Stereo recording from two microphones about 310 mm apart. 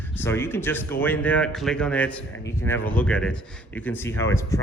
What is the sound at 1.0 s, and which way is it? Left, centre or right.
A man's voice, centre.